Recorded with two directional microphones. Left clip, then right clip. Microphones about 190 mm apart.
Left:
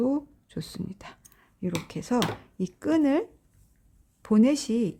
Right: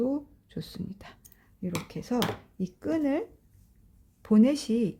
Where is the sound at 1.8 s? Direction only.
20° left (ahead or behind).